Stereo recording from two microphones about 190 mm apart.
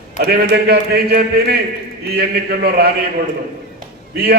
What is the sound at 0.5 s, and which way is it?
A man's voice, 55° right (ahead or behind).